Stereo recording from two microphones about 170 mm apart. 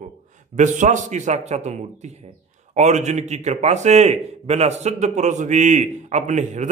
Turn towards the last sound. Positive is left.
turn(degrees=-45)  # may be behind; listen again after turning